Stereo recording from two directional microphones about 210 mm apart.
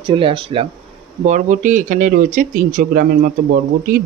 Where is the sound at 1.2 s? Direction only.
35° right (ahead or behind).